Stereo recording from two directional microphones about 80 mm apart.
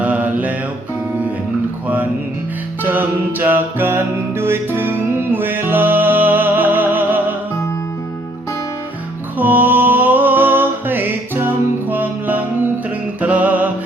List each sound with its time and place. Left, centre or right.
0.0 s music: centre
2.8 s music: right
9.4 s music: right